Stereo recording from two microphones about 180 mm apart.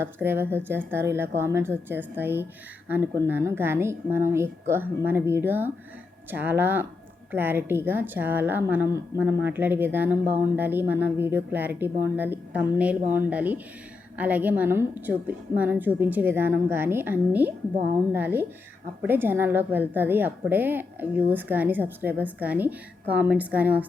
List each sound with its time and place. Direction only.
0.0 s a woman's voice: 10° right (ahead or behind)